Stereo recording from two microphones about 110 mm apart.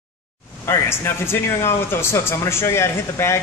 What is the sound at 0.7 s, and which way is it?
Speech, 25° left (ahead or behind).